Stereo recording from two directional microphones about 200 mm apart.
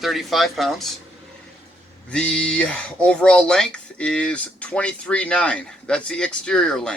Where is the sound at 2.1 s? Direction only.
5° left (ahead or behind).